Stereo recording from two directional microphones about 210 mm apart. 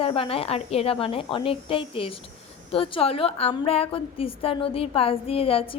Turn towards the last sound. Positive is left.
turn(degrees=25)  # may be behind; listen again after turning